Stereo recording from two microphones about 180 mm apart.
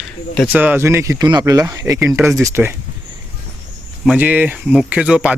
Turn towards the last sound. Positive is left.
turn(degrees=-5)  # may be behind; listen again after turning